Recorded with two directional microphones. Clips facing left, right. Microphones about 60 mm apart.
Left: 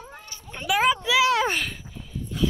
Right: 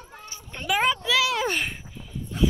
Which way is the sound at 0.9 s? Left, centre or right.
Centre.